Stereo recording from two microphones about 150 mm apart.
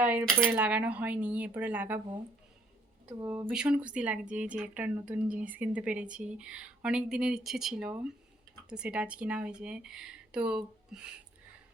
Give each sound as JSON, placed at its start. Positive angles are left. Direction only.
{"t": 0.0, "sound": "speech", "side_deg": -10}
{"t": 3.2, "sound": "speech", "side_deg": -15}